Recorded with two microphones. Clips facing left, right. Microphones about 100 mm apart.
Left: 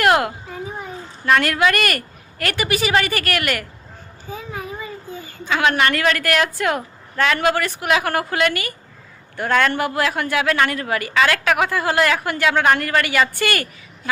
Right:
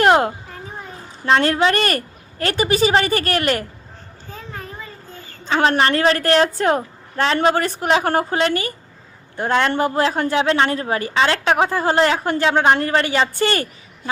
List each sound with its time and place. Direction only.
0.0 s children playing: 30° right (ahead or behind)
1.2 s a woman's voice: 30° right (ahead or behind)
4.3 s a sound: 10° left (ahead or behind)
5.5 s a woman's voice: 35° right (ahead or behind)